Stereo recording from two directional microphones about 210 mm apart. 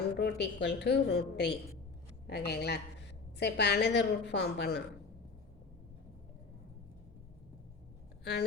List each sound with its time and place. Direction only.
0.2 s a woman's voice: 55° left (ahead or behind)
8.2 s speech: 50° left (ahead or behind)